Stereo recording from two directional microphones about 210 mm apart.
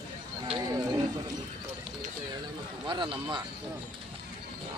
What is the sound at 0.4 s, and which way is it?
Wild animals, 20° right (ahead or behind).